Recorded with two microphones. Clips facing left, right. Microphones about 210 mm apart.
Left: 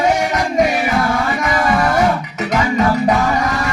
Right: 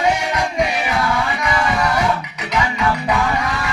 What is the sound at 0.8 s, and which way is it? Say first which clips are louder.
Music: left 3 dB; 50° left (ahead or behind).